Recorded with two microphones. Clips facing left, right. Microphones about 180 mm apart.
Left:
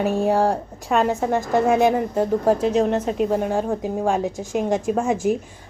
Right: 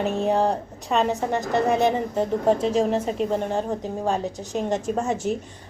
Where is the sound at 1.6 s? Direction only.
10° left (ahead or behind).